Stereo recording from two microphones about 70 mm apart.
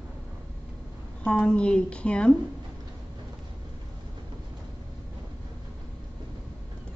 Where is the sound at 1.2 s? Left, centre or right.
Centre.